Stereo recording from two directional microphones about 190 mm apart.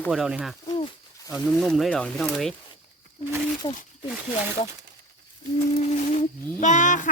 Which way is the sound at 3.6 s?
30° left (ahead or behind).